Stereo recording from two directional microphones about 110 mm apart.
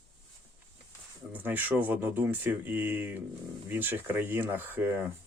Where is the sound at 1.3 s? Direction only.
15° right (ahead or behind).